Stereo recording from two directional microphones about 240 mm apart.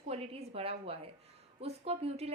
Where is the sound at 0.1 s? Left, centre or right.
Right.